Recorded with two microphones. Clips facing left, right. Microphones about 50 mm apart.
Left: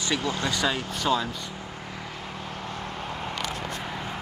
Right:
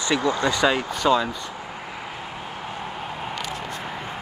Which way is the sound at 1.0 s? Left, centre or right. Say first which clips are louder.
Right 5 dB; right.